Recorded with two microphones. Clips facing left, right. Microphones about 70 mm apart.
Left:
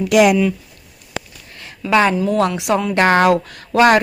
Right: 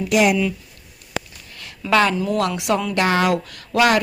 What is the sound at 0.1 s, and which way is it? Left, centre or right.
Speech, left.